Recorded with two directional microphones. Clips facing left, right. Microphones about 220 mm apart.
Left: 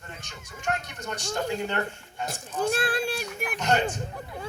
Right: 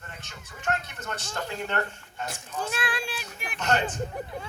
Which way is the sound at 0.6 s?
15° left (ahead or behind).